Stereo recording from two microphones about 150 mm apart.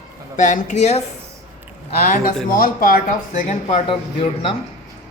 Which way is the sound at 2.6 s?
70° left (ahead or behind).